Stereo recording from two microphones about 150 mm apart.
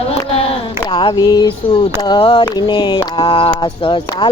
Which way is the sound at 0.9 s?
30° left (ahead or behind).